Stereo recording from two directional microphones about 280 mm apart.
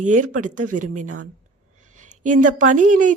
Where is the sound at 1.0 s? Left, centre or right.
Right.